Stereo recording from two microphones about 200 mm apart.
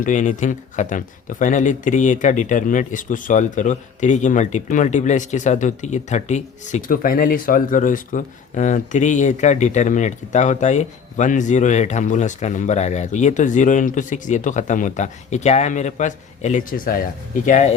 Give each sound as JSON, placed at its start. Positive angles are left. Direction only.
{"t": 0.0, "sound": "speech", "side_deg": 40}